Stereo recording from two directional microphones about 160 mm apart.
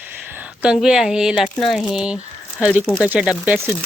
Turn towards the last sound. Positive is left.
turn(degrees=-10)  # may be behind; listen again after turning